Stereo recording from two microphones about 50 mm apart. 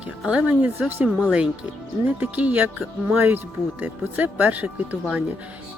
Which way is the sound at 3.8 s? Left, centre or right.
Right.